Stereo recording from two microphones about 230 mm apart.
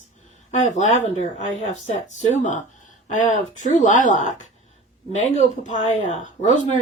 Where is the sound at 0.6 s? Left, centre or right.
Left.